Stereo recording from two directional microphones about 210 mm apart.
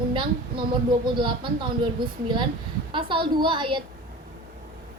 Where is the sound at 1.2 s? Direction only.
25° right (ahead or behind).